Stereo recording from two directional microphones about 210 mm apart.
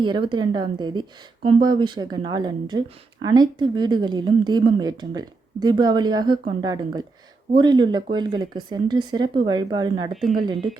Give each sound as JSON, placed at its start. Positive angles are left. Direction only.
{"t": 0.0, "sound": "a woman's voice", "side_deg": -20}